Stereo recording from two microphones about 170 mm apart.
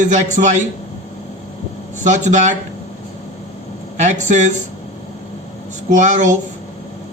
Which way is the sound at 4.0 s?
45° right (ahead or behind).